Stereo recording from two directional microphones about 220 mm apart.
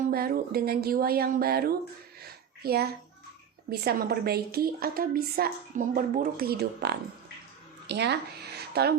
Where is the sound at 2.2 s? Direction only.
45° right (ahead or behind).